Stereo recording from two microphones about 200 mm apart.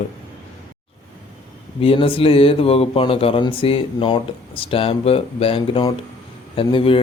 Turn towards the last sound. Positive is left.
turn(degrees=25)  # may be behind; listen again after turning